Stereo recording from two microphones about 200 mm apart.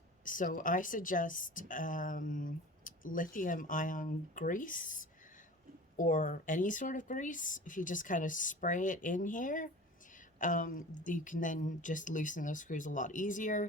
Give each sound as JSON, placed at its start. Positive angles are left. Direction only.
{"t": 0.3, "sound": "a woman's voice", "side_deg": 40}